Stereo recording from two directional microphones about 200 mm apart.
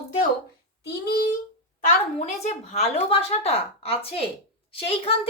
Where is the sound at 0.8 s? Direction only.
50° left (ahead or behind).